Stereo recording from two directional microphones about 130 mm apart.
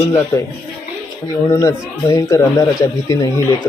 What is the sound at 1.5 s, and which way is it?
Speech, 25° left (ahead or behind).